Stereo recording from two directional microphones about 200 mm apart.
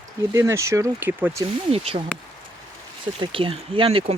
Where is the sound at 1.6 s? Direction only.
30° right (ahead or behind).